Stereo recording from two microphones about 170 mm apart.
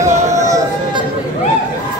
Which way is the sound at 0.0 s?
20° right (ahead or behind).